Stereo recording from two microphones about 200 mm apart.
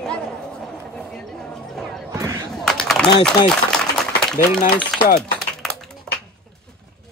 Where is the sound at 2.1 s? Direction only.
15° right (ahead or behind).